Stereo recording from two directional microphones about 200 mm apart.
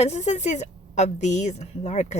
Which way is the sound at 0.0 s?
35° left (ahead or behind).